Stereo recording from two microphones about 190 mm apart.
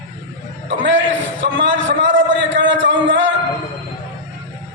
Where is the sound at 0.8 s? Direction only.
80° right.